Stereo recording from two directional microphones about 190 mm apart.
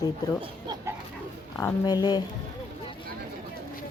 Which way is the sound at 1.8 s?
20° left (ahead or behind).